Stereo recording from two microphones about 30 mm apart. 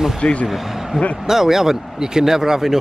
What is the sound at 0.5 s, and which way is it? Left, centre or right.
Speech, centre.